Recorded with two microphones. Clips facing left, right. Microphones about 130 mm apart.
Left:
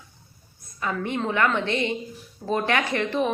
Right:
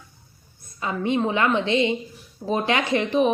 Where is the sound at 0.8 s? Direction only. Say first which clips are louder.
Right 4 dB; 20° right (ahead or behind).